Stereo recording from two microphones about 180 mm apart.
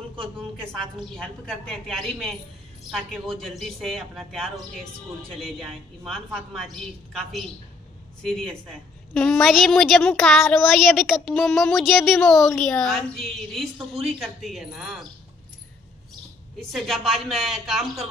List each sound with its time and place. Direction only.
0.9 s a woman's voice: 5° left (ahead or behind)
16.5 s a woman's voice: centre (ahead or behind)